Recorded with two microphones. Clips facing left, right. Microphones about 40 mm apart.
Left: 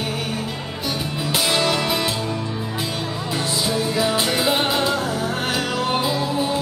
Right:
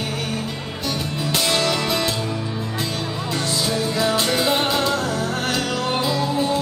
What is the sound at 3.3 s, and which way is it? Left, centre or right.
Music, centre.